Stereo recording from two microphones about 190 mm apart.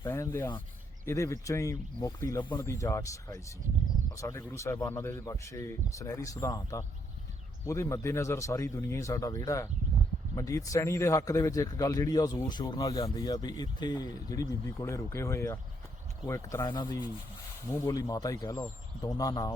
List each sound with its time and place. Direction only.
0.1 s a man's voice: 15° left (ahead or behind)